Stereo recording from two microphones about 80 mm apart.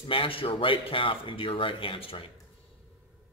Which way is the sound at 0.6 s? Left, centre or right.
Left.